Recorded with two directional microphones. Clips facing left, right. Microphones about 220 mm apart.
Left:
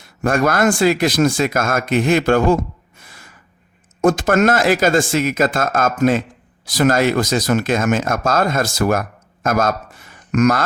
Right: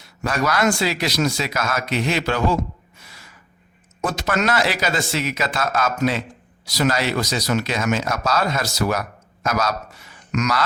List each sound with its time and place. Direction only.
0.0 s speech: 50° left (ahead or behind)